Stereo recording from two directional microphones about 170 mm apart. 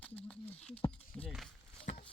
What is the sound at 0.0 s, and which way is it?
Patter, 10° left (ahead or behind).